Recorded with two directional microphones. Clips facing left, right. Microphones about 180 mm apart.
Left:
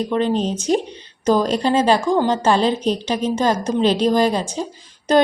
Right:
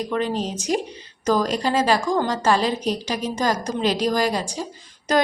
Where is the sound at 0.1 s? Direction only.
30° left (ahead or behind).